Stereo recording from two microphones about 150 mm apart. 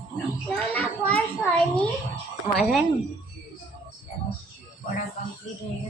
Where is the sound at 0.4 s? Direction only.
10° left (ahead or behind).